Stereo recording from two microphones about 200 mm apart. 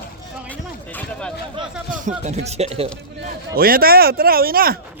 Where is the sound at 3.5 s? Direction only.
50° right (ahead or behind).